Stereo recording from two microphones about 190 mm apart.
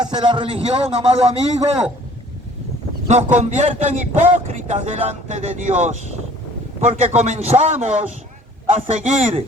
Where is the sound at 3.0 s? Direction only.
35° right (ahead or behind).